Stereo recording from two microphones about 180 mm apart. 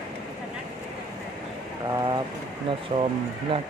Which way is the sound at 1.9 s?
20° right (ahead or behind).